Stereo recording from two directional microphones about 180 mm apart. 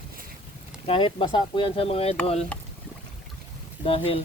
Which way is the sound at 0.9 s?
30° left (ahead or behind).